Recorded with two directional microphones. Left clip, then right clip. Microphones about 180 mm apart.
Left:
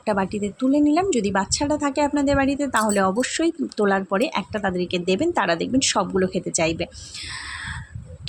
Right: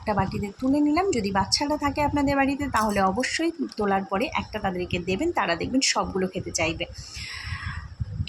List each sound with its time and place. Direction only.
0.0 s a woman's voice: 25° left (ahead or behind)